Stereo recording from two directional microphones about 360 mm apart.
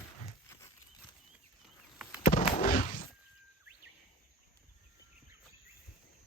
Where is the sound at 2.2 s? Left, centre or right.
Left.